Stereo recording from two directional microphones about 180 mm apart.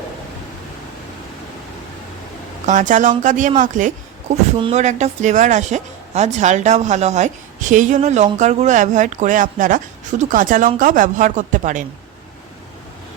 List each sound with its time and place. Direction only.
2.6 s speech: 45° right (ahead or behind)
4.5 s speech: 30° right (ahead or behind)
4.8 s a woman's voice: 40° right (ahead or behind)